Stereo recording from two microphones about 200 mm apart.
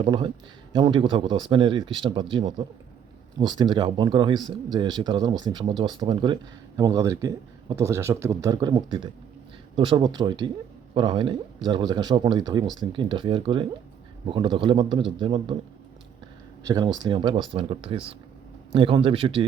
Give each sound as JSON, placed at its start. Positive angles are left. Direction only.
{"t": 0.0, "sound": "speech", "side_deg": -25}
{"t": 16.6, "sound": "speech", "side_deg": -20}